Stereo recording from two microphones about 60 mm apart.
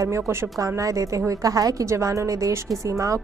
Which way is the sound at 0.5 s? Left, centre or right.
Right.